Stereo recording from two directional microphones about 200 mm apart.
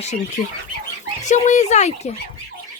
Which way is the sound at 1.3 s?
35° left (ahead or behind).